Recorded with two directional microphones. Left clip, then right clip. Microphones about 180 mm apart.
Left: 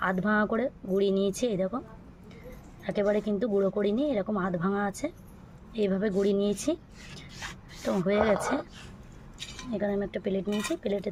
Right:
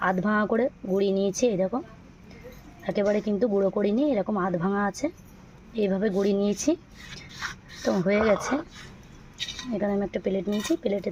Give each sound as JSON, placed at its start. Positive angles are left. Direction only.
{"t": 0.0, "sound": "speech", "side_deg": -30}
{"t": 2.8, "sound": "speech", "side_deg": -30}
{"t": 7.9, "sound": "speech", "side_deg": -20}
{"t": 9.7, "sound": "speech", "side_deg": -30}